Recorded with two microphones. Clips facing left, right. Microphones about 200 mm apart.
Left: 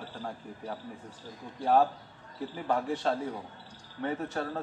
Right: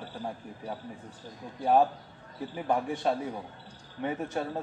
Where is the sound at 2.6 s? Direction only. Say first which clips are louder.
Right 1 dB; 15° right (ahead or behind).